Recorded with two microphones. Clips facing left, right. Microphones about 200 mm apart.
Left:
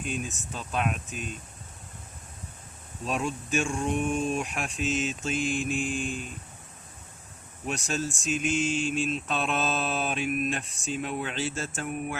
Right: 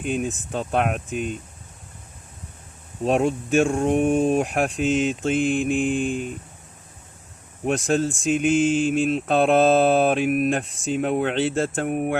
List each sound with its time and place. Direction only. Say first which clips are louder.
0.0 s speech: right 8 dB; 60° right (ahead or behind)
3.0 s speech: right 10 dB; 65° right (ahead or behind)
7.6 s speech: right 10 dB; 55° right (ahead or behind)